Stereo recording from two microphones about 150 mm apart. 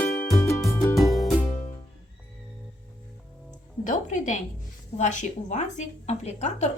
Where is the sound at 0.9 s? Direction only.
Centre (ahead or behind).